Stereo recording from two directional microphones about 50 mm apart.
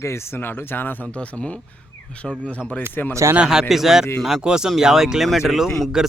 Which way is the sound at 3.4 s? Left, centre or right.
Centre.